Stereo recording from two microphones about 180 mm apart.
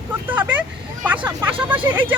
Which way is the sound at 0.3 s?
10° right (ahead or behind).